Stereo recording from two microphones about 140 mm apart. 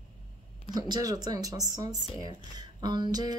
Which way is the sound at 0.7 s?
25° right (ahead or behind).